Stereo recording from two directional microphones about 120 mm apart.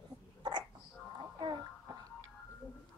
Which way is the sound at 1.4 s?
35° right (ahead or behind).